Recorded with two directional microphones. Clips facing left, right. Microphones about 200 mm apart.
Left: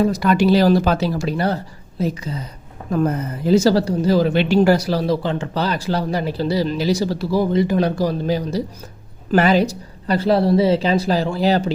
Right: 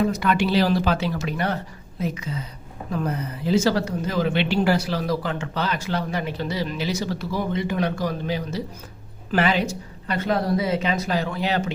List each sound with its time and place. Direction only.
0.0 s speech: 35° left (ahead or behind)
2.9 s speech: 45° left (ahead or behind)
5.0 s speech: 30° left (ahead or behind)